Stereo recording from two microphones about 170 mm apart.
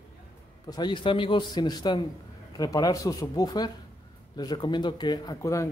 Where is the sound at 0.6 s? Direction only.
25° left (ahead or behind).